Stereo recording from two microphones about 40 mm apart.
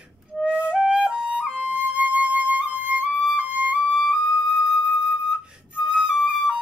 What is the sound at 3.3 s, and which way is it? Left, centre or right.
Music, right.